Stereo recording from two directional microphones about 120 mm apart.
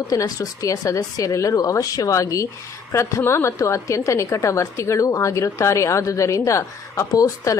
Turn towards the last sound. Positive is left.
turn(degrees=30)  # may be behind; listen again after turning